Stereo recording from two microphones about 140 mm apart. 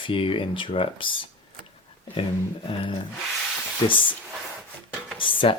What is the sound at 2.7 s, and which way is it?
Speech, 40° left (ahead or behind).